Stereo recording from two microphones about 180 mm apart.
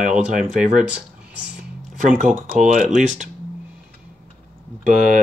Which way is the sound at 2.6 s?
45° right (ahead or behind).